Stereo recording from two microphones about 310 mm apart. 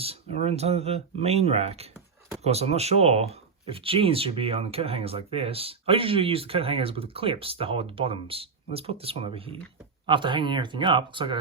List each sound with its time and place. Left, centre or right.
0.0 s speech: centre